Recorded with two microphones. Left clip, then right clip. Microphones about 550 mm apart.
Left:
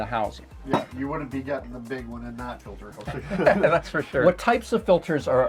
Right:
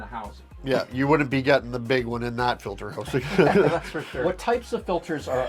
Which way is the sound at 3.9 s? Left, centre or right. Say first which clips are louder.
Left 6 dB; left.